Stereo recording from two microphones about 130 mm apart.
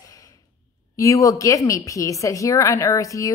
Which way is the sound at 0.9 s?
25° left (ahead or behind).